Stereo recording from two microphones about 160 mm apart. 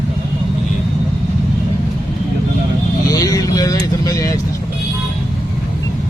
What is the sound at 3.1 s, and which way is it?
Speech, 20° left (ahead or behind).